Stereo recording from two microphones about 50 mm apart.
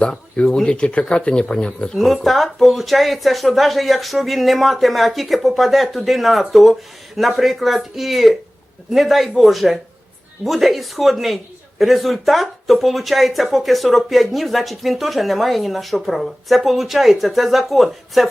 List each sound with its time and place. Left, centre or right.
0.0 s speech: left
2.0 s speech: centre